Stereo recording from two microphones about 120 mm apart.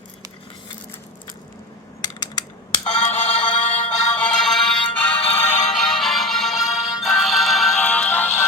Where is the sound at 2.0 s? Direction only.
35° left (ahead or behind).